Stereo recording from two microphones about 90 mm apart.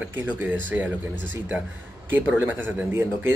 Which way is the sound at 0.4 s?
20° right (ahead or behind).